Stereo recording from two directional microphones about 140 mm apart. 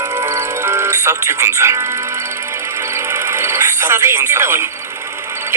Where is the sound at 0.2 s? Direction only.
20° right (ahead or behind).